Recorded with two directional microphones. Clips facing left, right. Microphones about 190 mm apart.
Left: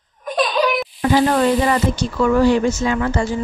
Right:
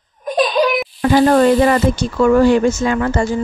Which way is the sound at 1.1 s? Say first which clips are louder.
Right 4 dB; 50° right (ahead or behind).